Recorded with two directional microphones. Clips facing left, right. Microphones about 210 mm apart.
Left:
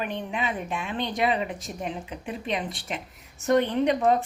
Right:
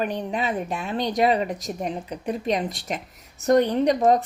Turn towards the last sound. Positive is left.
turn(degrees=-35)  # may be behind; listen again after turning